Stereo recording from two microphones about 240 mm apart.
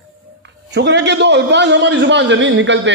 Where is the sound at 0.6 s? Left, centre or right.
Right.